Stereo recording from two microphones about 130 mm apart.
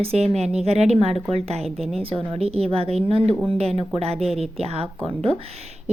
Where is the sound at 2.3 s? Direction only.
50° right (ahead or behind).